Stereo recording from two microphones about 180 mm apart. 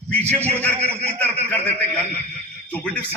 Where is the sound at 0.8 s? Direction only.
35° right (ahead or behind).